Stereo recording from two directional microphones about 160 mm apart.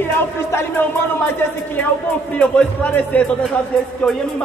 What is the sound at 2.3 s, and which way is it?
Speech, 10° left (ahead or behind).